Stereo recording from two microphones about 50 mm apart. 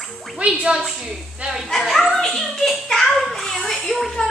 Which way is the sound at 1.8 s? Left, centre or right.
Centre.